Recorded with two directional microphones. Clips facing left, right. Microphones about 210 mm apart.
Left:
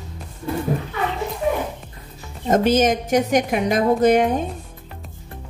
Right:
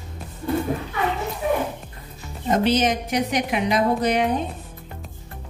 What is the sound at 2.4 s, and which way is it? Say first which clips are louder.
A woman's voice: left 3 dB; 45° left (ahead or behind).